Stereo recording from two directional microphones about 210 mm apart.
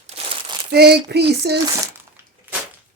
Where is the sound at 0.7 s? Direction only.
50° right (ahead or behind).